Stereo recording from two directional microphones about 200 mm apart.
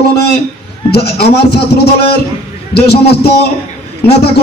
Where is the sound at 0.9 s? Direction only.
55° left (ahead or behind).